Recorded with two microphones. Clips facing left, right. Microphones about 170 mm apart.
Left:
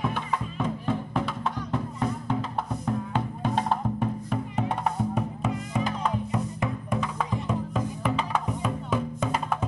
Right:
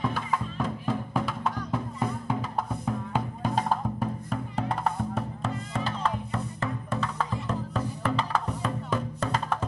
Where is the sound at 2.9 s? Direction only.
5° right (ahead or behind).